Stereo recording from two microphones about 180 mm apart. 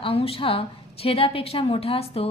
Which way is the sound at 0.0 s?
30° left (ahead or behind).